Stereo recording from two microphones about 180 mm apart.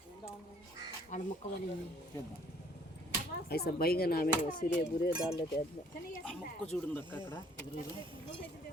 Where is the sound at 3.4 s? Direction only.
60° left (ahead or behind).